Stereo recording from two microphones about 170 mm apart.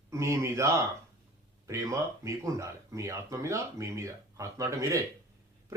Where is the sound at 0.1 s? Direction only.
15° right (ahead or behind).